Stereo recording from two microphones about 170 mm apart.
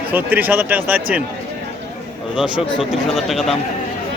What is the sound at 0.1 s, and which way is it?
Speech, 10° right (ahead or behind).